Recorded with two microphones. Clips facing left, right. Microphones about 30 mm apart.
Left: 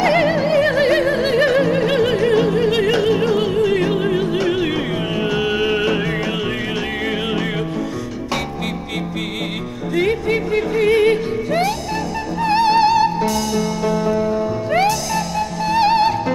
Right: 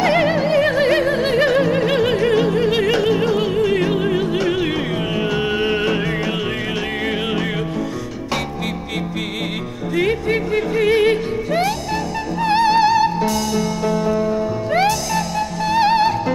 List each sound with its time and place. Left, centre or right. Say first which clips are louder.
0.0 s music: left 1 dB; centre
1.0 s opera: left 1 dB; centre
5.4 s music: left 2 dB; left
10.5 s yodeling: left 1 dB; centre
10.9 s music: left 1 dB; centre
12.6 s music: left 1 dB; centre
13.2 s music: even; centre
15.8 s music: even; centre